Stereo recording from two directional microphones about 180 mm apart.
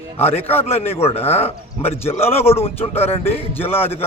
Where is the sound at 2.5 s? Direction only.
15° left (ahead or behind).